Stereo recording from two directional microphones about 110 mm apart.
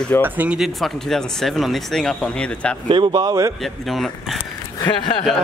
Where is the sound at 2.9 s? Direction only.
45° right (ahead or behind).